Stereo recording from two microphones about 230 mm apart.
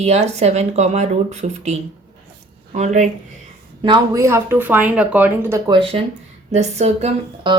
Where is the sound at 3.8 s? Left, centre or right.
Centre.